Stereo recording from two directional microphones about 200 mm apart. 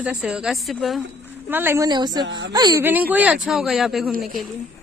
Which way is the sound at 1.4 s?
10° right (ahead or behind).